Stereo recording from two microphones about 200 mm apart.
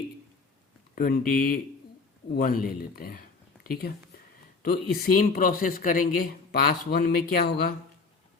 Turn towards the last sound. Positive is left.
turn(degrees=50)  # may be behind; listen again after turning